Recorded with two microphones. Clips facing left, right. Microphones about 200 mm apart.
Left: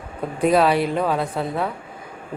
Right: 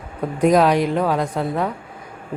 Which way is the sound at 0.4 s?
15° right (ahead or behind).